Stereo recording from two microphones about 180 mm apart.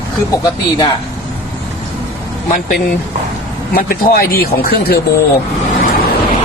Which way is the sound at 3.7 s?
55° left (ahead or behind).